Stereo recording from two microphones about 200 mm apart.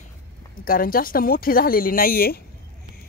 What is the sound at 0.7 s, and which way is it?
Speech, 45° left (ahead or behind).